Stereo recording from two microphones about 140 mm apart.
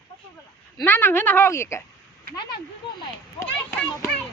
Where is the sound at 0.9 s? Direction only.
15° left (ahead or behind).